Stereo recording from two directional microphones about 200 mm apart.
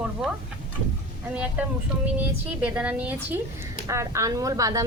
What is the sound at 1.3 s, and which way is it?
A woman's voice, 5° right (ahead or behind).